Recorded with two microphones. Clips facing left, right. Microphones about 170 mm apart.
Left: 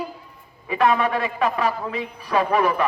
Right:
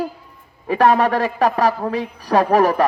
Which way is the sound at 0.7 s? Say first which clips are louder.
Right 5 dB; 40° right (ahead or behind).